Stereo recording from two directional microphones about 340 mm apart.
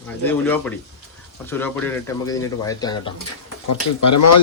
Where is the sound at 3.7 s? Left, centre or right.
Left.